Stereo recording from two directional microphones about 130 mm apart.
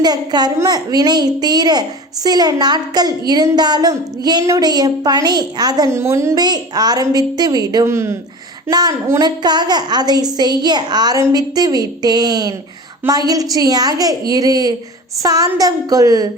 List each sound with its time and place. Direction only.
0.0 s a woman's voice: 30° right (ahead or behind)